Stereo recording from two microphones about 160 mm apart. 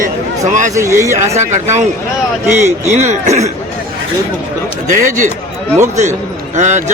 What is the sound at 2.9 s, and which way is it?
Speech, 45° right (ahead or behind).